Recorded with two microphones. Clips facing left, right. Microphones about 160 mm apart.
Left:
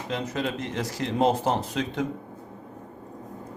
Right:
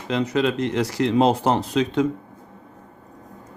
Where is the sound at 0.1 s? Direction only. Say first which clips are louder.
Right 8 dB; 85° right.